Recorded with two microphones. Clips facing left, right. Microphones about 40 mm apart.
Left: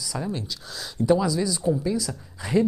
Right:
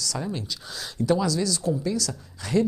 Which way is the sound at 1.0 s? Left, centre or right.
Centre.